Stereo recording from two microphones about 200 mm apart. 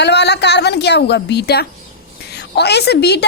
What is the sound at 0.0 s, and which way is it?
A woman's voice, 55° left (ahead or behind).